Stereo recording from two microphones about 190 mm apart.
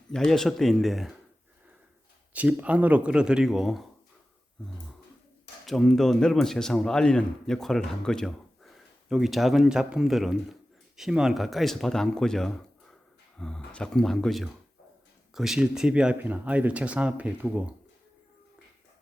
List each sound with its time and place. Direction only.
0.1 s a man's voice: centre (ahead or behind)
2.3 s a man's voice: 5° right (ahead or behind)
5.6 s a man's voice: centre (ahead or behind)